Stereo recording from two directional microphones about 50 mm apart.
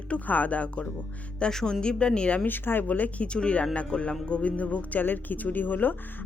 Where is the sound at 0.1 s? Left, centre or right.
Left.